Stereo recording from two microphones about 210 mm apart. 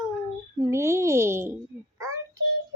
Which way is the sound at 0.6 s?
15° right (ahead or behind).